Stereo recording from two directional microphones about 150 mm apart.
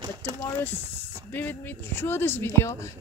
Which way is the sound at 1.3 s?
15° left (ahead or behind).